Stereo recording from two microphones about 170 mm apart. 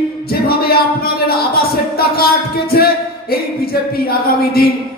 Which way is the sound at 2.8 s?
65° left (ahead or behind).